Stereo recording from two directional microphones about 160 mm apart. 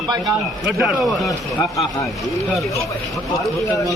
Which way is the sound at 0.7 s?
Centre (ahead or behind).